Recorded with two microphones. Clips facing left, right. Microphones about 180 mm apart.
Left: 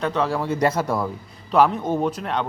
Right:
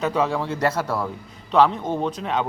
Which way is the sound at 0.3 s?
10° left (ahead or behind).